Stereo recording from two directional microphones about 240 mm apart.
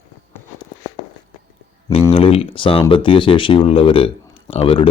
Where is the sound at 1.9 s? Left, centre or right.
Left.